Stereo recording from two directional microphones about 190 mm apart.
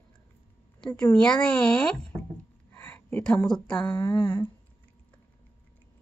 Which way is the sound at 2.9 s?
5° left (ahead or behind).